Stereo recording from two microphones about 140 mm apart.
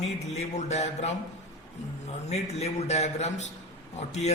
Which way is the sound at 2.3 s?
50° left (ahead or behind).